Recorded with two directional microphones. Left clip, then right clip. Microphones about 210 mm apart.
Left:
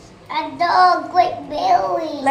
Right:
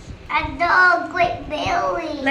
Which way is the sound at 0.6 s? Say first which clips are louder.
Left 2 dB; 35° right (ahead or behind).